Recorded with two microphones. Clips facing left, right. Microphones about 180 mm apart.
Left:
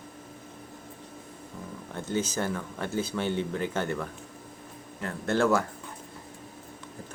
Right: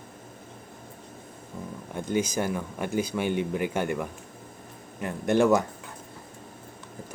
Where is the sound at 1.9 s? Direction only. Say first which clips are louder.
Right 3 dB; 15° right (ahead or behind).